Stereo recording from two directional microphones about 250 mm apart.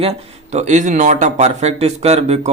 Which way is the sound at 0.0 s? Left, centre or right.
Right.